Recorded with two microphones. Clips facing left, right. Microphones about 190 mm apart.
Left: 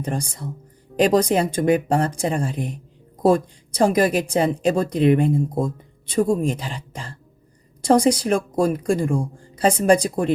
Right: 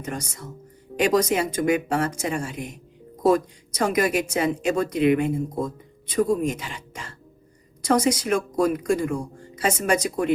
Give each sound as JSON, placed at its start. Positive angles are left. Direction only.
{"t": 0.0, "sound": "a woman's voice", "side_deg": 30}